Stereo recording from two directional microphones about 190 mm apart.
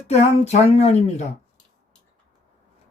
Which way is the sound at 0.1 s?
35° left (ahead or behind).